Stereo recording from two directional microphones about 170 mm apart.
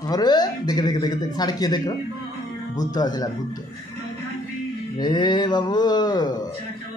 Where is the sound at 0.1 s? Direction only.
25° left (ahead or behind).